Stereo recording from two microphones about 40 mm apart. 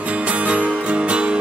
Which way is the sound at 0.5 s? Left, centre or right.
Right.